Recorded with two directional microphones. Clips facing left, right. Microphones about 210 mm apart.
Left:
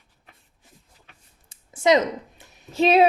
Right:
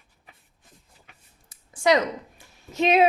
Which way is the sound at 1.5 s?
25° left (ahead or behind).